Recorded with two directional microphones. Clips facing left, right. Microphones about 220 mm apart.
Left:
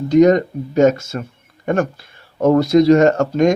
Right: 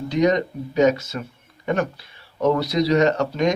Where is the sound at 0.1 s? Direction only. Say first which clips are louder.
Left 8 dB; 45° left (ahead or behind).